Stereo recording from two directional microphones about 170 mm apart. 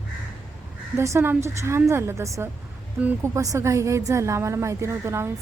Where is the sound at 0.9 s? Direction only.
15° right (ahead or behind).